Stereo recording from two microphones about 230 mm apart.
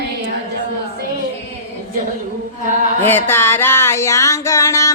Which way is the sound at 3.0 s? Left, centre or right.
Centre.